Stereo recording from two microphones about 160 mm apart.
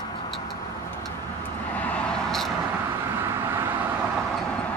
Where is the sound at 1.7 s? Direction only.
10° left (ahead or behind).